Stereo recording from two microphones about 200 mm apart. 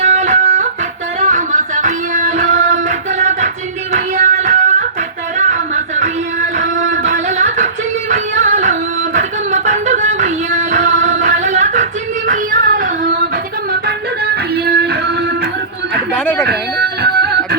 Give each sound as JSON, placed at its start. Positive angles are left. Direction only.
{"t": 0.0, "sound": "guitar", "side_deg": -35}
{"t": 1.2, "sound": "music", "side_deg": -40}
{"t": 3.9, "sound": "guitar", "side_deg": -35}
{"t": 5.4, "sound": "music", "side_deg": -35}
{"t": 16.1, "sound": "a sound", "side_deg": 10}
{"t": 16.5, "sound": "music", "side_deg": -55}